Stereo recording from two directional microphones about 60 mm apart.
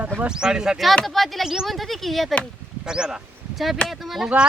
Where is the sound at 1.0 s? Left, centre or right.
Centre.